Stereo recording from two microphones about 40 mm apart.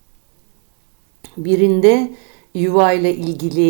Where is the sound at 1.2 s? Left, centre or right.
Centre.